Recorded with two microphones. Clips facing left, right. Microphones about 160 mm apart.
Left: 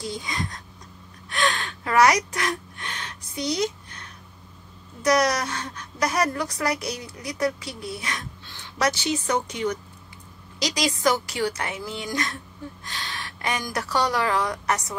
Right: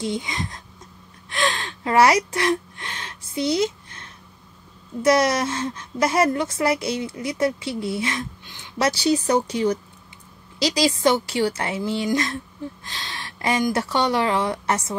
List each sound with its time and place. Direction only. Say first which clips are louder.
0.0 s a woman's voice: right 4 dB; 20° right (ahead or behind)
1.3 s gasp: right 1 dB; 25° right (ahead or behind)
5.0 s a woman's voice: right 3 dB; 25° right (ahead or behind)
8.8 s a woman's voice: right 4 dB; 35° right (ahead or behind)